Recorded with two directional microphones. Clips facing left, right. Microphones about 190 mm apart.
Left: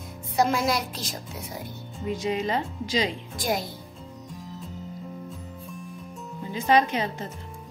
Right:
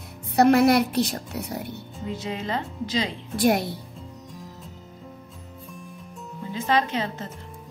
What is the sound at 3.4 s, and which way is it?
Speech, 65° right (ahead or behind).